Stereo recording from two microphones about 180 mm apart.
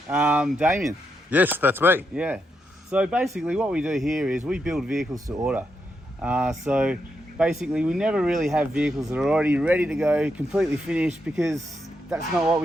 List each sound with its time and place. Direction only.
0.1 s speech: 5° right (ahead or behind)
5.1 s speech: 20° right (ahead or behind)
6.2 s speech: 5° right (ahead or behind)